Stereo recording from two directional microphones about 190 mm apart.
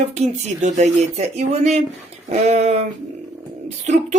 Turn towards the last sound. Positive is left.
turn(degrees=-40)  # may be behind; listen again after turning